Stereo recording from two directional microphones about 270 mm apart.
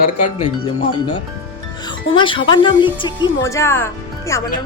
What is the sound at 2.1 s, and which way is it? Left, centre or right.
Speech, centre.